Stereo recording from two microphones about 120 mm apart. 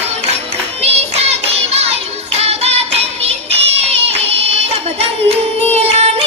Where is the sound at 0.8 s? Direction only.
55° right (ahead or behind).